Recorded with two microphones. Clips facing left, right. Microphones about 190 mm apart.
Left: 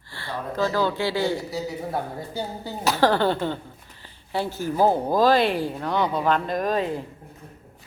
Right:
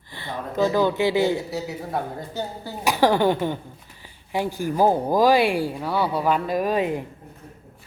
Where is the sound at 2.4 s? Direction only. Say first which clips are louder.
Right 1 dB; 10° left (ahead or behind).